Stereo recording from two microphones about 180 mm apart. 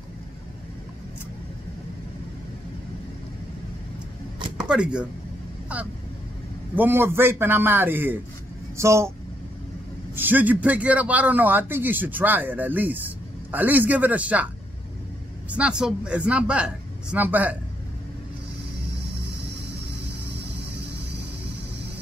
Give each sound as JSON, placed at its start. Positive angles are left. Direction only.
{"t": 4.6, "sound": "speech", "side_deg": -5}
{"t": 6.7, "sound": "a man's voice", "side_deg": -10}
{"t": 10.1, "sound": "a man's voice", "side_deg": -10}
{"t": 15.5, "sound": "a man's voice", "side_deg": -5}